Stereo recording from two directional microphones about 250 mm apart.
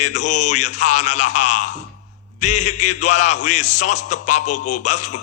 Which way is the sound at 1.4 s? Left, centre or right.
Left.